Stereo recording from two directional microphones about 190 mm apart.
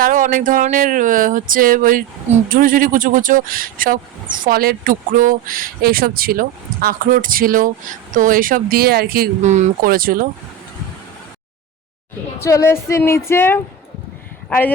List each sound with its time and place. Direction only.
0.0 s speech: 45° right (ahead or behind)
12.4 s speech: 15° left (ahead or behind)